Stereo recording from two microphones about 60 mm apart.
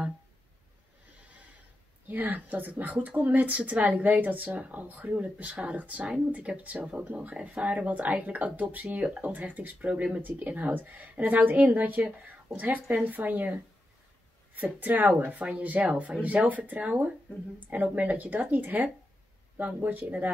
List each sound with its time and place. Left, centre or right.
2.0 s speech: right